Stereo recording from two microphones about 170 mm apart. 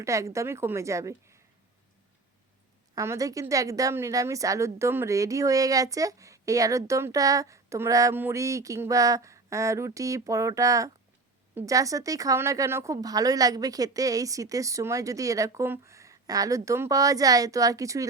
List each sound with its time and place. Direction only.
0.0 s a woman's voice: 15° right (ahead or behind)
2.9 s a woman's voice: 20° right (ahead or behind)